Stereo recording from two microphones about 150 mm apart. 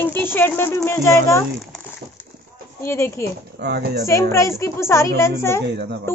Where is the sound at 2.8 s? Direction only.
15° left (ahead or behind).